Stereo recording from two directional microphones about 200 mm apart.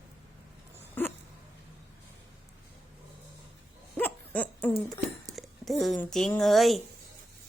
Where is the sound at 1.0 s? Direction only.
10° left (ahead or behind).